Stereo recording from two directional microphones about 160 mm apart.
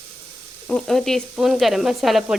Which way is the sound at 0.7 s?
5° left (ahead or behind).